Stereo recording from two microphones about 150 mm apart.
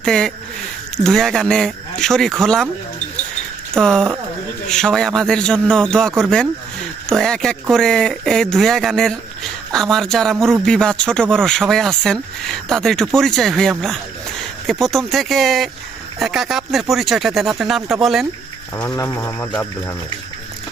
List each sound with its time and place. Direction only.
0.0 s speech: 5° left (ahead or behind)
3.8 s speech: 5° left (ahead or behind)
18.9 s speech: 20° left (ahead or behind)